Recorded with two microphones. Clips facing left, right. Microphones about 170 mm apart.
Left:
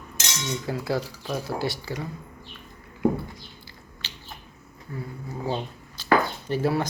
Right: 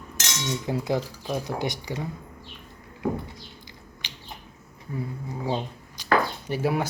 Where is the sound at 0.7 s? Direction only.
20° right (ahead or behind).